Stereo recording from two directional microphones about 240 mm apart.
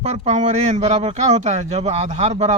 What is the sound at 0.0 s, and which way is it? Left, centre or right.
Speech, right.